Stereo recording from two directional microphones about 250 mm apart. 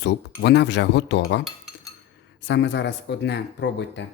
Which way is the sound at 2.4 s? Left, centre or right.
Left.